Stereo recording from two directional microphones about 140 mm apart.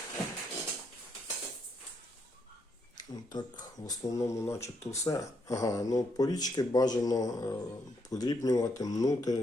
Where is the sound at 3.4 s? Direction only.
30° left (ahead or behind).